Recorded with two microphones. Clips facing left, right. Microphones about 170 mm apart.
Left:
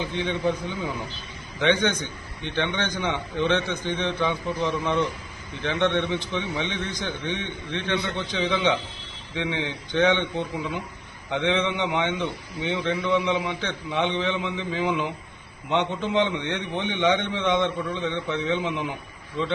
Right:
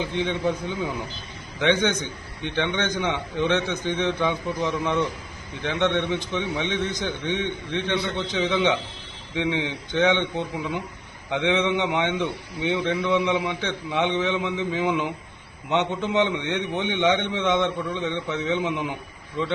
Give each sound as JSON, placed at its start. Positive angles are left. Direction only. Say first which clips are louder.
{"t": 0.0, "sound": "a man's voice", "louder": "right 1 dB", "side_deg": -15}
{"t": 17.4, "sound": "a man's voice", "louder": "right 1 dB", "side_deg": 15}
{"t": 17.9, "sound": "a man's voice", "louder": "even", "side_deg": -10}